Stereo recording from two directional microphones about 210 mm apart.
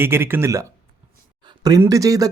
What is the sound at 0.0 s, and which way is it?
Speech, 10° right (ahead or behind).